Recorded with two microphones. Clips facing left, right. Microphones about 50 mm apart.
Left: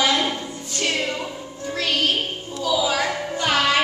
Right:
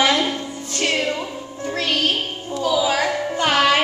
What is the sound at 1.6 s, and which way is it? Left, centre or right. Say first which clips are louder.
Music: right 1 dB; right.